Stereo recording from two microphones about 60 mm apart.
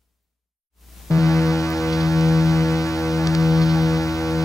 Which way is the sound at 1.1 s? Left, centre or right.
Left.